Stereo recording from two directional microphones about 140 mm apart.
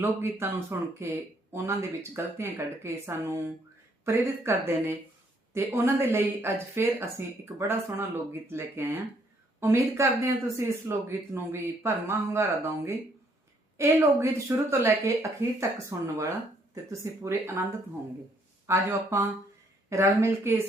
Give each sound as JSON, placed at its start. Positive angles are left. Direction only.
{"t": 0.0, "sound": "speech", "side_deg": -20}
{"t": 18.6, "sound": "speech", "side_deg": -20}